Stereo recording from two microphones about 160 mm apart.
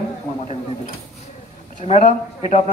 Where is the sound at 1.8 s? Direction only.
45° left (ahead or behind).